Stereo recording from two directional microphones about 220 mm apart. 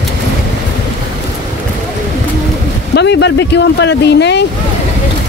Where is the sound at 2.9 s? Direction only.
50° left (ahead or behind).